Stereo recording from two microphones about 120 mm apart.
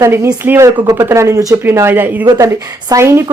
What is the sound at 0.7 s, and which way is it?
Speech, 35° right (ahead or behind).